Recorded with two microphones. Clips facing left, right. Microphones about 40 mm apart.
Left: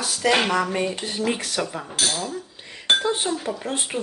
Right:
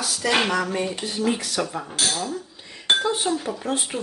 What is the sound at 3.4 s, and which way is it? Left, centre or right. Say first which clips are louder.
Speech: left 1 dB; centre.